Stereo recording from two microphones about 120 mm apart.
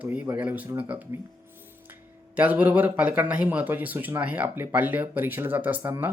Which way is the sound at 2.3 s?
15° right (ahead or behind).